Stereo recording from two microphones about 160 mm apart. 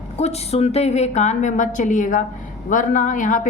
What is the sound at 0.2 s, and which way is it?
A woman's voice, 40° left (ahead or behind).